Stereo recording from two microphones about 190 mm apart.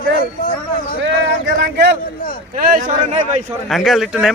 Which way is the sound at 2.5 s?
45° right (ahead or behind).